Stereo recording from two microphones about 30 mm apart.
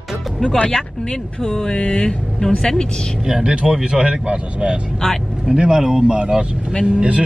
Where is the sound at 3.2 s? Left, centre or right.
Right.